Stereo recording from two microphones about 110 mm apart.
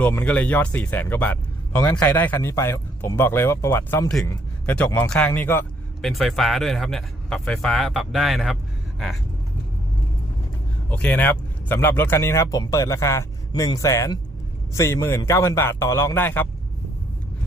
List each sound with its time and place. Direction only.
0.1 s a man's voice: 15° left (ahead or behind)
4.6 s speech: 10° left (ahead or behind)
5.3 s a man's voice: 20° left (ahead or behind)
6.0 s speech: centre (ahead or behind)
10.8 s a man's voice: 15° left (ahead or behind)
13.5 s speech: 40° left (ahead or behind)
13.7 s a man's voice: 30° left (ahead or behind)